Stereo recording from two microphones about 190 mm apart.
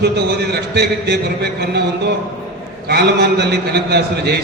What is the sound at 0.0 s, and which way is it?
A man's voice, 60° right (ahead or behind).